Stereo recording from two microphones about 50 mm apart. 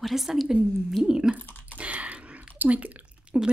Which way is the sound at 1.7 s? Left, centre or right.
Right.